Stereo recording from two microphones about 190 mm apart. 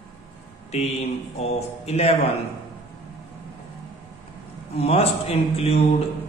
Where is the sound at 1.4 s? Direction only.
35° left (ahead or behind).